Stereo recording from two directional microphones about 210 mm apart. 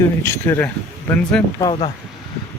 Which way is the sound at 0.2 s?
10° left (ahead or behind).